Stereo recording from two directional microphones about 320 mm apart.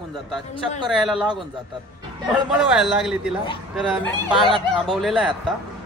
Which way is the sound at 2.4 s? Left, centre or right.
Centre.